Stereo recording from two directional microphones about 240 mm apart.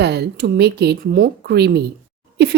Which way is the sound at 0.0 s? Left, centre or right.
Right.